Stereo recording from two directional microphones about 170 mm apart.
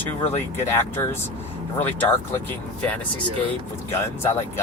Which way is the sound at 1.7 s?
10° left (ahead or behind).